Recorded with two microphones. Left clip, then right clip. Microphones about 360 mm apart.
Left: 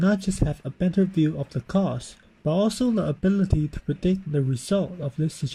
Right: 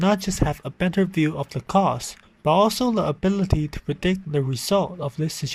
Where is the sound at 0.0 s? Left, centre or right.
Centre.